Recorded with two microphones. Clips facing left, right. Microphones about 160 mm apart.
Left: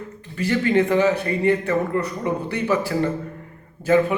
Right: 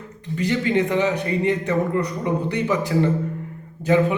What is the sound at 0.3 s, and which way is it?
A man's voice, 20° right (ahead or behind).